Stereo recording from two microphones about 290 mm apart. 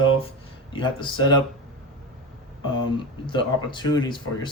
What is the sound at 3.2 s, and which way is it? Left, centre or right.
Speech, centre.